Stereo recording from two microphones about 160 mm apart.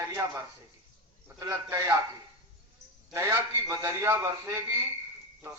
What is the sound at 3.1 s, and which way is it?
A man's voice, 20° right (ahead or behind).